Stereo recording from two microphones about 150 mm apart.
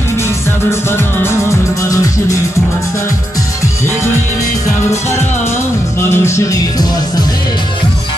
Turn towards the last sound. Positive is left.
turn(degrees=25)  # may be behind; listen again after turning